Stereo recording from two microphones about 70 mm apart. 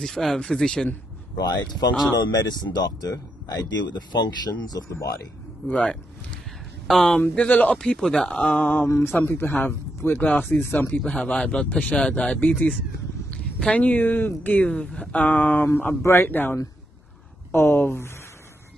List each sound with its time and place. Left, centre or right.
0.0 s speech: centre
1.4 s speech: left
5.7 s speech: centre
6.9 s speech: centre
7.2 s speech: left
11.1 s speech: centre; by 18.1 s left